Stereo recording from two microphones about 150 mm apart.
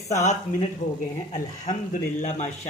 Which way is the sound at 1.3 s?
55° left (ahead or behind).